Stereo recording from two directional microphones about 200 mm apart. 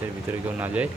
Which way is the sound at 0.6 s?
5° right (ahead or behind).